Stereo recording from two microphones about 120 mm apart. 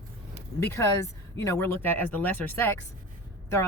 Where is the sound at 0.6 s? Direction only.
25° left (ahead or behind).